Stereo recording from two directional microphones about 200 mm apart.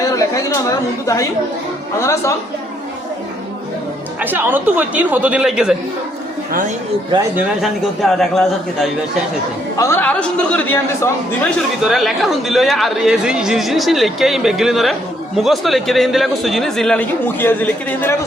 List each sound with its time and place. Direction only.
1.0 s a man's voice: 15° left (ahead or behind)
4.2 s a man's voice: 10° right (ahead or behind)
6.5 s speech: 45° right (ahead or behind)
7.3 s speech: centre (ahead or behind)
9.7 s a man's voice: 15° left (ahead or behind)